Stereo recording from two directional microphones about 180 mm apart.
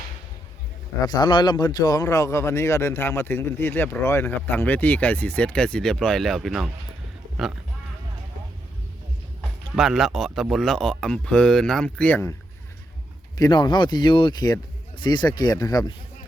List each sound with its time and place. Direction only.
1.0 s speech: 25° left (ahead or behind); by 6.7 s centre (ahead or behind)
9.4 s speech: centre (ahead or behind)
13.3 s speech: 20° left (ahead or behind)